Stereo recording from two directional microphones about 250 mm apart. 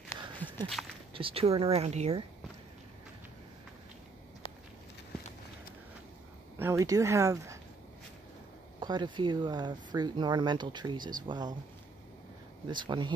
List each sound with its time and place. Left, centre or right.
0.4 s walk: centre
0.8 s a sound: centre
1.1 s speech: right
6.6 s speech: centre
8.7 s speech: centre
12.6 s speech: centre